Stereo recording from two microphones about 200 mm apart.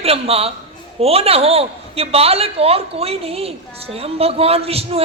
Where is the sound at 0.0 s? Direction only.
30° right (ahead or behind).